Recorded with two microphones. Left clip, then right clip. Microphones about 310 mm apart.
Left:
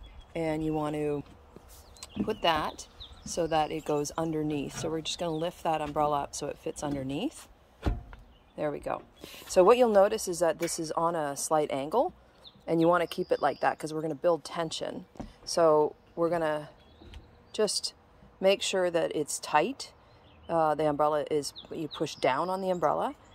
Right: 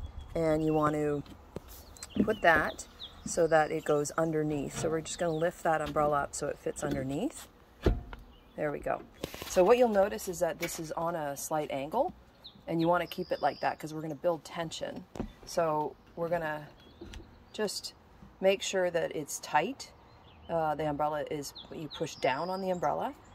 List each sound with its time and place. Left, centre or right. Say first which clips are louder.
0.3 s speech: right 2 dB; centre
2.8 s speech: right 1 dB; centre
8.5 s speech: left 1 dB; centre